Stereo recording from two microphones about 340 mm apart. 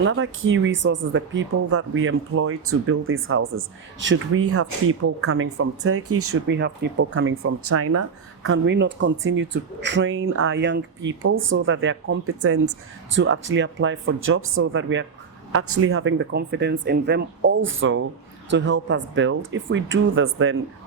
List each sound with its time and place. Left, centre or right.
0.0 s speech: right